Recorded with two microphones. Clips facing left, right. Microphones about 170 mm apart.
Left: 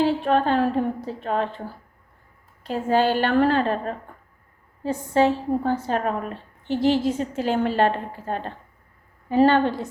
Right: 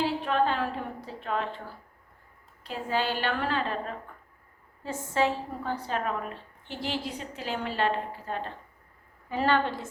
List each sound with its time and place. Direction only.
0.3 s a woman's voice: 45° left (ahead or behind)
2.6 s a woman's voice: 50° left (ahead or behind)
4.8 s a woman's voice: 35° left (ahead or behind)
9.3 s a woman's voice: 35° left (ahead or behind)